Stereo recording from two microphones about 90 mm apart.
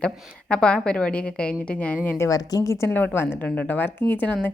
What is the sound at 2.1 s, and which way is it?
Speech, 35° left (ahead or behind).